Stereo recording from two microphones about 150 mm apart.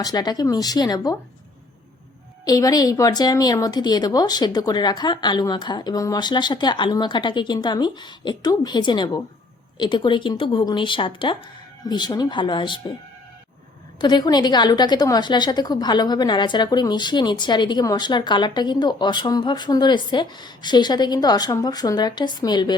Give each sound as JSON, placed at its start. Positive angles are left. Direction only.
{"t": 0.0, "sound": "a woman's voice", "side_deg": 25}
{"t": 2.4, "sound": "a woman's voice", "side_deg": 25}
{"t": 14.0, "sound": "a woman's voice", "side_deg": 30}